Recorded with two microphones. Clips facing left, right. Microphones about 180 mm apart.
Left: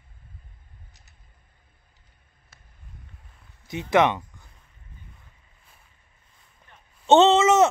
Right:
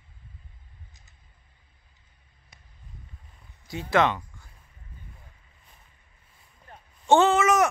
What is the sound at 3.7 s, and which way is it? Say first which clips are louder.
Speech: left 3 dB; 20° left (ahead or behind).